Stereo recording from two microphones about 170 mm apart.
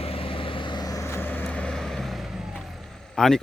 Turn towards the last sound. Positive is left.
turn(degrees=5)  # may be behind; listen again after turning